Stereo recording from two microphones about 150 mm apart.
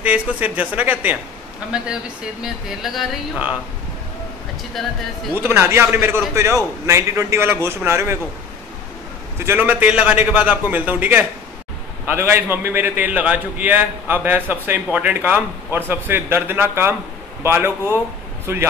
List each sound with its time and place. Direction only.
0.0 s a man's voice: 10° right (ahead or behind)
2.4 s speech: centre (ahead or behind)
4.8 s speech: centre (ahead or behind)
5.3 s a man's voice: 15° right (ahead or behind)
9.4 s a man's voice: 15° right (ahead or behind)